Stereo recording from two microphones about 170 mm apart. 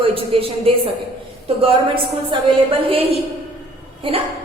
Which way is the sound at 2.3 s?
30° right (ahead or behind).